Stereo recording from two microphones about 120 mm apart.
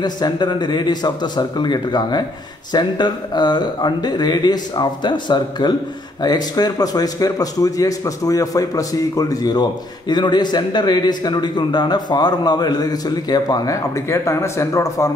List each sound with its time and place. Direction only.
0.0 s a man's voice: 35° left (ahead or behind)